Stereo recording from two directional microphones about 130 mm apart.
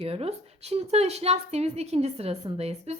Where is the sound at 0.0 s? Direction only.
50° right (ahead or behind).